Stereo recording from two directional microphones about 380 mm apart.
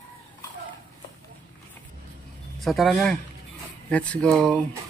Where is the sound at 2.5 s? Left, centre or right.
Centre.